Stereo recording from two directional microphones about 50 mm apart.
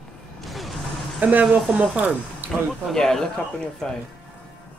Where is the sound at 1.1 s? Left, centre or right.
Right.